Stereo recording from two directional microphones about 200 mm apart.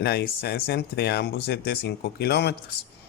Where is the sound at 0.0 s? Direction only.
55° left (ahead or behind).